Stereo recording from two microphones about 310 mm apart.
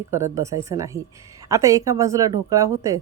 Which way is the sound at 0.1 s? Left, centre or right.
Centre.